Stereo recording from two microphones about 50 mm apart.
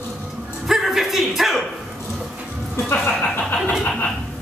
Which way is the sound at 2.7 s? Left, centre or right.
Left.